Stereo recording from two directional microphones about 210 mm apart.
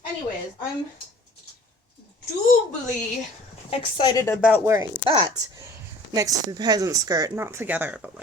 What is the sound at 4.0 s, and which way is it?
Speech, 20° left (ahead or behind).